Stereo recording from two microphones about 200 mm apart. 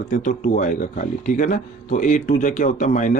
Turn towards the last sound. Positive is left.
turn(degrees=40)  # may be behind; listen again after turning